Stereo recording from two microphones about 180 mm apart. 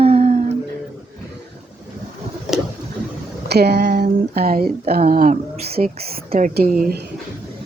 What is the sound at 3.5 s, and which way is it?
Speech, 65° right (ahead or behind).